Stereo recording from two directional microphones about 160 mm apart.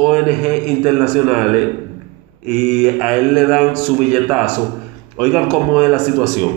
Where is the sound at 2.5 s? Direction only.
Centre (ahead or behind).